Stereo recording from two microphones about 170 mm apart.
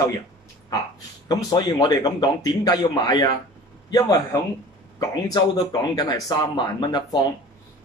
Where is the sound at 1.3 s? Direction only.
20° left (ahead or behind).